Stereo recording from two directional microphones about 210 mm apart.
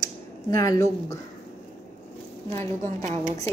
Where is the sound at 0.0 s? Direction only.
15° left (ahead or behind).